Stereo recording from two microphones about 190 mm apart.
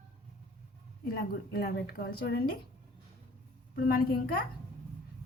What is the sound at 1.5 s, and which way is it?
Speech, 55° left (ahead or behind).